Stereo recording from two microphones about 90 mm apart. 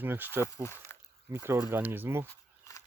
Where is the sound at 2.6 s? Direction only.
40° left (ahead or behind).